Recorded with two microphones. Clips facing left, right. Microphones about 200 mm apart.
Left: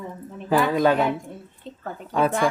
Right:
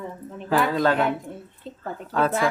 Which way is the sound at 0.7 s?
15° left (ahead or behind).